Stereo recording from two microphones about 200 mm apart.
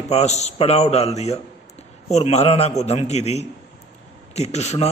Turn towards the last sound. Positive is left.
turn(degrees=35)  # may be behind; listen again after turning